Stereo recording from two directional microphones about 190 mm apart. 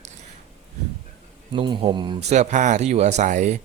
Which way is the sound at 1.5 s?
25° right (ahead or behind).